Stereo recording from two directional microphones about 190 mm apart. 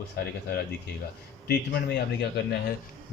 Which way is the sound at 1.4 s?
60° left (ahead or behind).